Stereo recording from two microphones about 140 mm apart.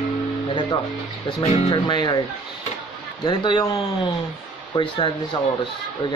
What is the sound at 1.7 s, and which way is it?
Speech, 35° left (ahead or behind).